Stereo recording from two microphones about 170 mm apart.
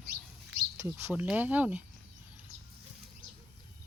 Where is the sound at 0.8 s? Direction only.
15° right (ahead or behind).